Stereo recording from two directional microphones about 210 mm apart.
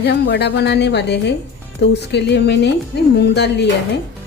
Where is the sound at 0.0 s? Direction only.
55° left (ahead or behind).